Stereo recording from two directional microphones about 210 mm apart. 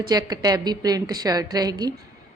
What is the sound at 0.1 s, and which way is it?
A woman's voice, 20° right (ahead or behind).